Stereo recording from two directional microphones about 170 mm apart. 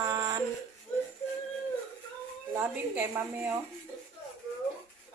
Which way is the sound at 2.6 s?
10° right (ahead or behind).